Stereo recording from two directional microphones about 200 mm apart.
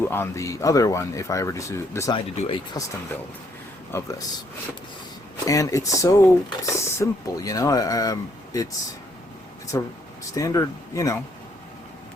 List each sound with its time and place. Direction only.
0.0 s speech: 10° left (ahead or behind)
2.1 s speech: 25° left (ahead or behind)
3.1 s speech: 10° left (ahead or behind)
5.5 s speech: 15° left (ahead or behind)